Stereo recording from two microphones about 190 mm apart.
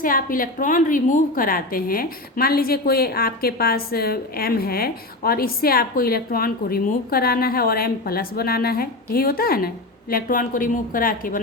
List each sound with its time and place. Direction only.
0.0 s a woman's voice: 45° left (ahead or behind)